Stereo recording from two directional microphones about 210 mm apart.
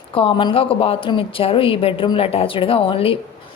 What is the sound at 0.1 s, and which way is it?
A woman's voice, 25° left (ahead or behind).